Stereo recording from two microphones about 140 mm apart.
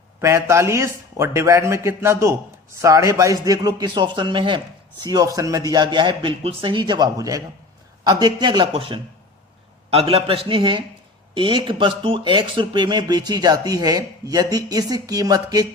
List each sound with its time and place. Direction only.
0.2 s speech: 20° right (ahead or behind)